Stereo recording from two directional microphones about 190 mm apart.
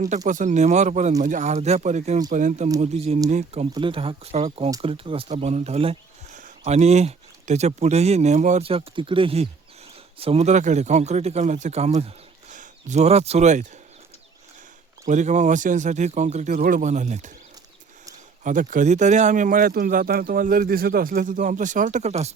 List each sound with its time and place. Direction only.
0.3 s speech: 40° right (ahead or behind)
15.0 s speech: 40° right (ahead or behind)
18.4 s speech: 40° right (ahead or behind)